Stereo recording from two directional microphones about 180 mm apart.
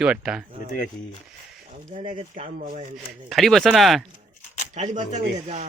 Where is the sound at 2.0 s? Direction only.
30° right (ahead or behind).